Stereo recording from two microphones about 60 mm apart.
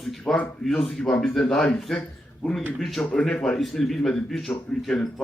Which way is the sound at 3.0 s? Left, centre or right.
Centre.